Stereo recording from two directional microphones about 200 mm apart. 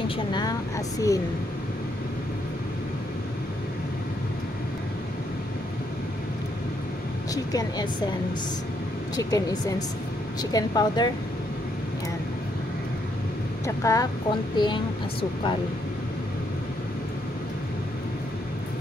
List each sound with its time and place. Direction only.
0.3 s speech: 20° left (ahead or behind)
7.5 s speech: 20° left (ahead or behind)
9.1 s speech: 20° left (ahead or behind)
13.7 s speech: 15° left (ahead or behind)